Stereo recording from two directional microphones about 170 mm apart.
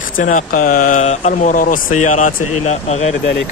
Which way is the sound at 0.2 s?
50° left (ahead or behind).